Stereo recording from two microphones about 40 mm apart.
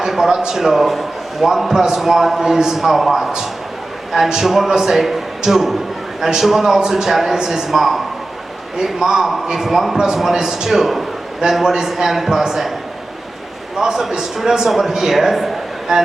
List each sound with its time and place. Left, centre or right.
0.0 s a man's voice: centre
7.7 s a man's voice: centre
13.7 s a man's voice: centre